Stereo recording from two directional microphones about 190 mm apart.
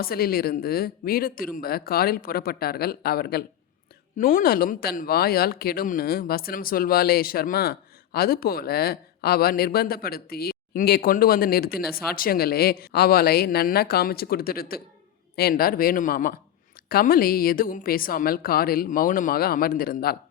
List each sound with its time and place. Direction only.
0.0 s speech: 50° left (ahead or behind)